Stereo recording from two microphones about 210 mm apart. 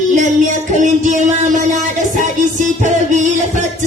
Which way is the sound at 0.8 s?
35° right (ahead or behind).